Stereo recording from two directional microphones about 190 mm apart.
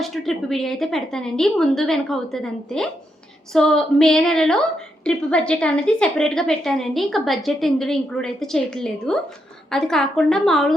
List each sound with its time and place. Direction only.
0.0 s a woman's voice: centre (ahead or behind)